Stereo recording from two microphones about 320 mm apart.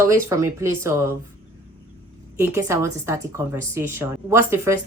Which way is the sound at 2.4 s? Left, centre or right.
Centre.